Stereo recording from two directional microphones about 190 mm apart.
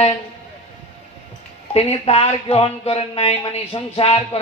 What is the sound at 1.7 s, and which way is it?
Speech, 30° left (ahead or behind).